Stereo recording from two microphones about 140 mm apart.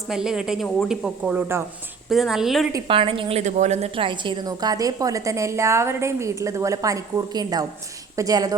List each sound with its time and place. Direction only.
0.1 s speech: 5° right (ahead or behind)
2.0 s speech: centre (ahead or behind)
2.8 s a woman's voice: 40° right (ahead or behind)